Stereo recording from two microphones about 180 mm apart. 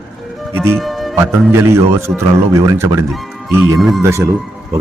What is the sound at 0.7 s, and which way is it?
Music, centre (ahead or behind).